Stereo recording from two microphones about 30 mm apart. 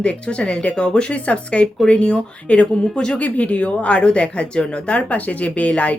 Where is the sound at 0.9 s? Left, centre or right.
Left.